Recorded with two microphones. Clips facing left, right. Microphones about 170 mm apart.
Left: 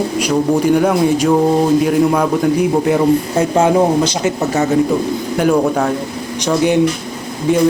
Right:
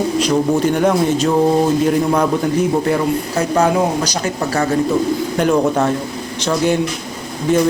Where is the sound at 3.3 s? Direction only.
25° left (ahead or behind).